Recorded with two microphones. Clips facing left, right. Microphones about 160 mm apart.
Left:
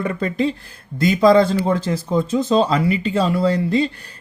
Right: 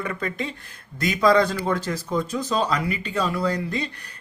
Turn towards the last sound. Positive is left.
turn(degrees=30)  # may be behind; listen again after turning